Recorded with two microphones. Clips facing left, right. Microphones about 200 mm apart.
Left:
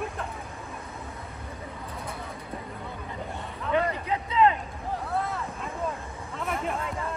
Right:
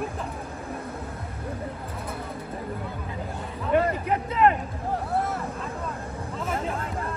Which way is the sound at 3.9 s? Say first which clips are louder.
Right 3 dB; 55° right (ahead or behind).